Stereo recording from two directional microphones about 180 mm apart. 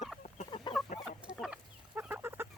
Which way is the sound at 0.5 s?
25° left (ahead or behind).